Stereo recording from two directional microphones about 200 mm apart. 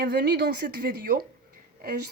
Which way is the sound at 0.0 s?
55° right (ahead or behind).